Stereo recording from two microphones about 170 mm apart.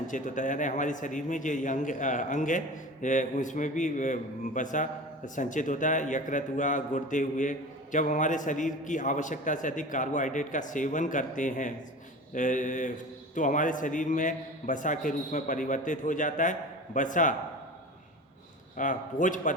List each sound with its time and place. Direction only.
0.1 s a man's voice: 50° left (ahead or behind)
18.8 s a man's voice: 50° left (ahead or behind)